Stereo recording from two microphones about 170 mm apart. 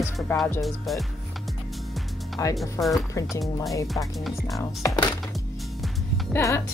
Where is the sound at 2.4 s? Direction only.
20° left (ahead or behind).